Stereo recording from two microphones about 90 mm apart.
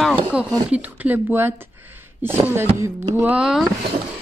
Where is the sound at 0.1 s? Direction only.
15° right (ahead or behind).